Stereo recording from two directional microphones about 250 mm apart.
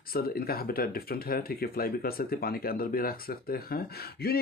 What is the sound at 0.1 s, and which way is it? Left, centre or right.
Speech, left.